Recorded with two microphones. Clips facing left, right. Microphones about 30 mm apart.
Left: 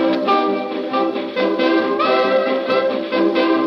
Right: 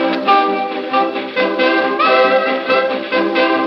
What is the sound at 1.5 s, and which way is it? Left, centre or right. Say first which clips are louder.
Brass instrument: right 2 dB; right.